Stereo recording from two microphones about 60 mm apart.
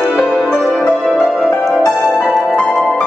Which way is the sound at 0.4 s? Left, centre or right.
Centre.